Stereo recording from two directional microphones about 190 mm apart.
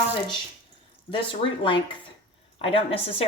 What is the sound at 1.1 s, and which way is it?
A woman's voice, 25° left (ahead or behind).